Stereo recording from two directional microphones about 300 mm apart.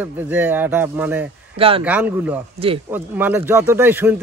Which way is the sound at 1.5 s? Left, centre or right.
Centre.